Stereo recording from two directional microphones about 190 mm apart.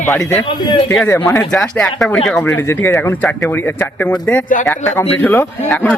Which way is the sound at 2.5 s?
10° left (ahead or behind).